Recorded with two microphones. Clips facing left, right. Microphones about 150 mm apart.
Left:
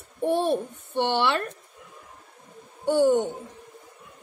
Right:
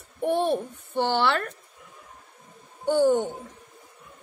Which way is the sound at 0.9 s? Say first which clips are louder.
Even; 20° left (ahead or behind).